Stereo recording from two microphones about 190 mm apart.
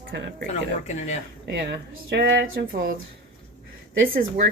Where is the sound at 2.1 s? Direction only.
65° right (ahead or behind).